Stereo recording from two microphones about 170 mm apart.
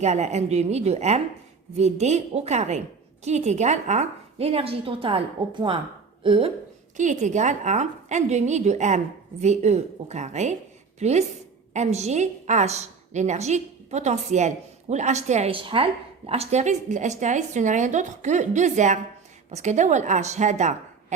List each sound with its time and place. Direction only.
0.0 s a woman's voice: 40° right (ahead or behind)
6.9 s a woman's voice: 45° right (ahead or behind)